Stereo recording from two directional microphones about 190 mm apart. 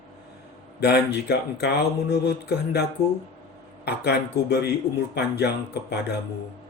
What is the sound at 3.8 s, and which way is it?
A man's voice, 60° left (ahead or behind).